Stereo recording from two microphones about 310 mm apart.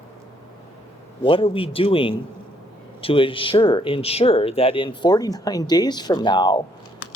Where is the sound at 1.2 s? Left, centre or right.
Centre.